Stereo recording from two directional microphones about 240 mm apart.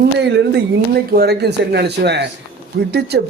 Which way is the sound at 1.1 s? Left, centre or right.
Right.